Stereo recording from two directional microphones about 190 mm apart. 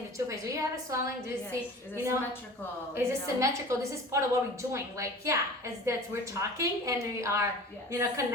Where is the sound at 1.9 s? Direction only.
15° right (ahead or behind).